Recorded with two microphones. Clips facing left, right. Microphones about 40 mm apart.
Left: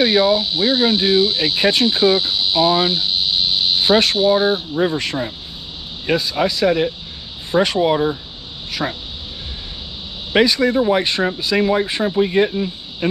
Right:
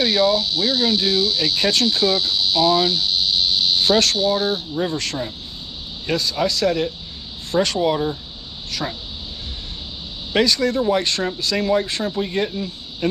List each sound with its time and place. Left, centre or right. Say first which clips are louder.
0.0 s speech: left 3 dB; centre
10.3 s speech: left 3 dB; centre